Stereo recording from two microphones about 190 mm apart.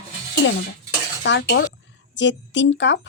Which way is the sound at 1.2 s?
70° left (ahead or behind).